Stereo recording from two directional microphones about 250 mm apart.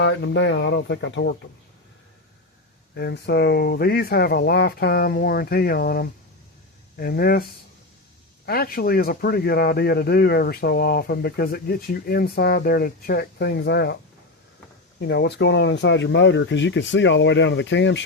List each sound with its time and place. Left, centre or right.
0.0 s speech: left
2.9 s speech: left
8.4 s speech: left
15.0 s speech: left